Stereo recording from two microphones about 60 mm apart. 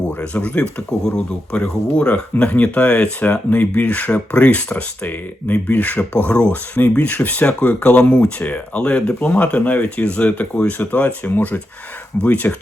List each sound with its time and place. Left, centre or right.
0.1 s speech: left